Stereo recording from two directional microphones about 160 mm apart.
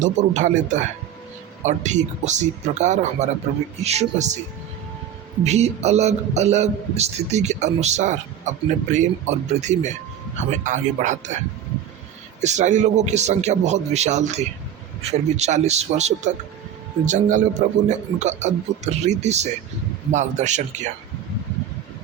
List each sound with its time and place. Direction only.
0.0 s a man's voice: 50° right (ahead or behind)
5.4 s a man's voice: 45° right (ahead or behind)
12.4 s a man's voice: 45° right (ahead or behind)